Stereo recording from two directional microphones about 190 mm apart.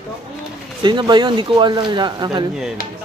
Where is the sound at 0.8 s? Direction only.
25° right (ahead or behind).